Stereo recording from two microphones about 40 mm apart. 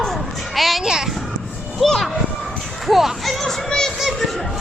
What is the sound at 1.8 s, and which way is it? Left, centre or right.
A child's voice, centre.